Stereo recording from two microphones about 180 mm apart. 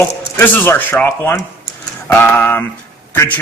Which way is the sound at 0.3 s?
10° left (ahead or behind).